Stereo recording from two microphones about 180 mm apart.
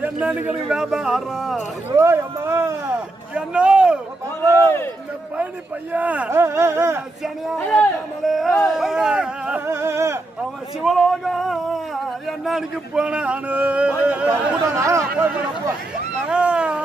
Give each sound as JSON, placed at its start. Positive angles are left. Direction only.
{"t": 0.0, "sound": "speech", "side_deg": -10}
{"t": 2.0, "sound": "speech", "side_deg": -15}
{"t": 4.6, "sound": "a man's voice", "side_deg": 15}
{"t": 5.9, "sound": "speech", "side_deg": -10}
{"t": 7.4, "sound": "speech", "side_deg": 5}
{"t": 10.8, "sound": "speech", "side_deg": 0}
{"t": 16.3, "sound": "a sound", "side_deg": -5}